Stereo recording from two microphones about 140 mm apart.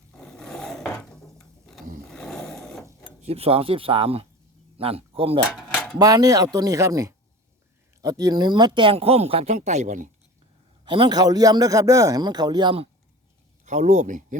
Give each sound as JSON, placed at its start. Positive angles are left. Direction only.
{"t": 0.2, "sound": "filing", "side_deg": 5}
{"t": 2.0, "sound": "a sound", "side_deg": 5}
{"t": 3.2, "sound": "speech", "side_deg": -45}
{"t": 6.0, "sound": "a man's voice", "side_deg": -25}
{"t": 10.8, "sound": "a man's voice", "side_deg": -35}
{"t": 13.7, "sound": "speech", "side_deg": -55}